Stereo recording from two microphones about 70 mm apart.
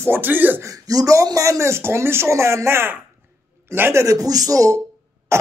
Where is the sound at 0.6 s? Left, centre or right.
Right.